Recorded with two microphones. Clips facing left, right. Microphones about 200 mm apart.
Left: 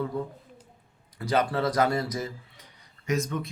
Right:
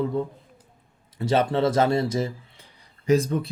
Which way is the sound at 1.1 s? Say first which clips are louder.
Right 4 dB; 25° right (ahead or behind).